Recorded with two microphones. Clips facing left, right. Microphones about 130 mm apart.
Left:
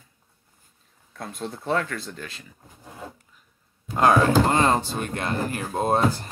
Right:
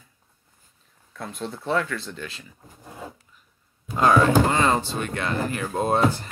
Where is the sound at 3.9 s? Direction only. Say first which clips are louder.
Even; 55° left (ahead or behind).